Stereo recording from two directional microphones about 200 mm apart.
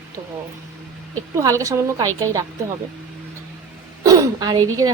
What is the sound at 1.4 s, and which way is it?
Speech, 15° right (ahead or behind).